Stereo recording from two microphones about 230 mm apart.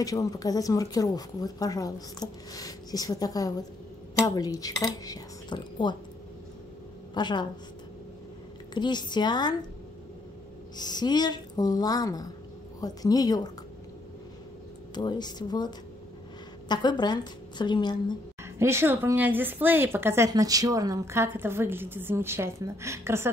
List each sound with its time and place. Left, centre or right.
0.0 s speech: centre
7.2 s a woman's voice: centre
8.7 s a woman's voice: centre
10.8 s speech: centre
15.0 s a woman's voice: centre
18.4 s a woman's voice: centre